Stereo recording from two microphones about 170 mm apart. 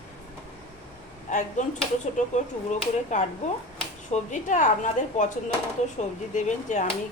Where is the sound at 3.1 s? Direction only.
45° left (ahead or behind).